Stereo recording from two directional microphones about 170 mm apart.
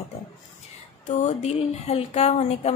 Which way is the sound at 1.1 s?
40° left (ahead or behind).